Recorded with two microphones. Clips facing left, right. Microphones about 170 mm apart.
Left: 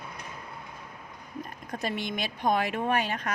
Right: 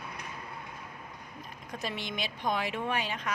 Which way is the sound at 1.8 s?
50° left (ahead or behind).